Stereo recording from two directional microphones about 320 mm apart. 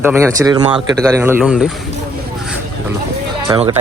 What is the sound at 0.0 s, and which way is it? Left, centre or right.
Speech, centre.